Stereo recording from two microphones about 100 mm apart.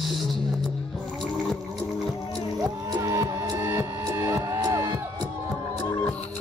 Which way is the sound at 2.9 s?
30° right (ahead or behind).